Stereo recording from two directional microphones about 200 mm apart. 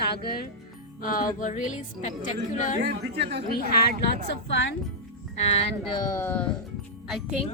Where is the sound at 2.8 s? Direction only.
55° right (ahead or behind).